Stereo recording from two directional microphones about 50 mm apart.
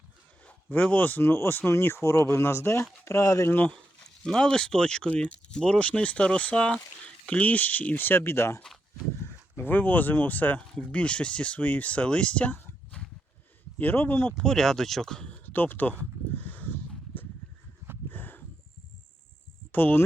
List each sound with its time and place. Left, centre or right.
0.7 s speech: left
1.2 s speech: left
1.7 s speech: left
4.3 s speech: centre; by 8.6 s left
9.2 s speech: left
10.8 s speech: left
11.6 s speech: left
13.0 s horse: centre
13.7 s speech: left
14.3 s speech: centre
15.4 s speech: left
16.4 s a sound: left
18.1 s a sound: left
19.7 s speech: left